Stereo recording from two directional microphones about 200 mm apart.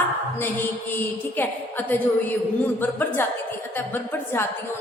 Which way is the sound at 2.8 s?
10° left (ahead or behind).